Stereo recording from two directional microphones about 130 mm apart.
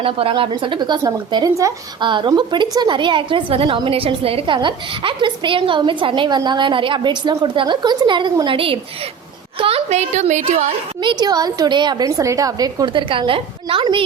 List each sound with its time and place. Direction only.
0.0 s a woman's voice: 45° right (ahead or behind); by 10.7 s 65° right (ahead or behind)
11.0 s a woman's voice: 35° right (ahead or behind)